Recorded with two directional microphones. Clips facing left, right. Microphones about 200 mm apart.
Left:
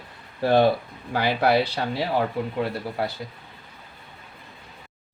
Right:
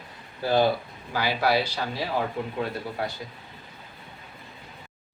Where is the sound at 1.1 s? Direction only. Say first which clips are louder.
Left 3 dB; 60° left (ahead or behind).